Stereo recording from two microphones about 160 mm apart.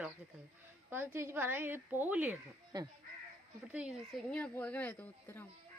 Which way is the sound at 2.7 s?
25° right (ahead or behind).